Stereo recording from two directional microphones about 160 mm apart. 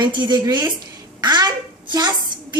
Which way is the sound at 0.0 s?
30° right (ahead or behind).